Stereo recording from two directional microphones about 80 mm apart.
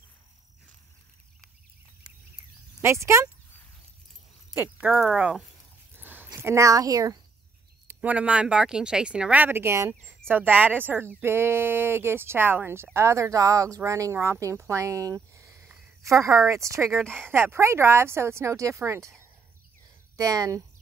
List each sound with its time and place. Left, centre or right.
2.8 s speech: right
4.6 s speech: centre
5.0 s speech: centre
5.9 s a sound: right
8.0 s speech: centre; by 9.9 s right
10.0 s speech: right